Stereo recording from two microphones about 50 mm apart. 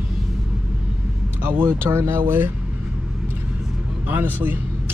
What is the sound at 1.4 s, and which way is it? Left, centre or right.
Speech, right.